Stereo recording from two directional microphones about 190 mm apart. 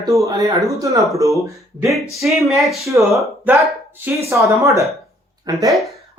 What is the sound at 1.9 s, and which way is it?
Speech, centre (ahead or behind).